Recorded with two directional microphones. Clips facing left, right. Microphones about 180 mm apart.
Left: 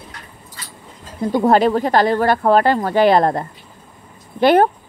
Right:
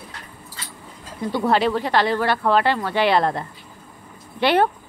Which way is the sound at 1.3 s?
45° left (ahead or behind).